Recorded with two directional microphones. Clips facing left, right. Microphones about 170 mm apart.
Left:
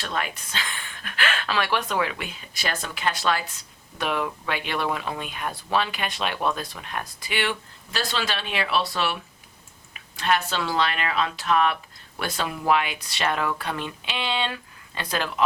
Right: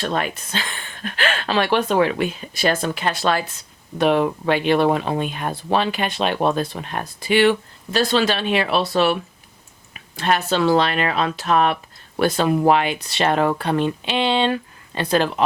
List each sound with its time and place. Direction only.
0.0 s speech: 45° right (ahead or behind)
1.0 s speech: 30° right (ahead or behind)
3.9 s speech: 35° right (ahead or behind)
10.2 s speech: 40° right (ahead or behind)